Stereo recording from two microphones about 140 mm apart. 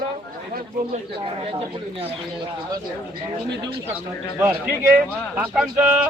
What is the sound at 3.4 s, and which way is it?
Speech, 30° right (ahead or behind).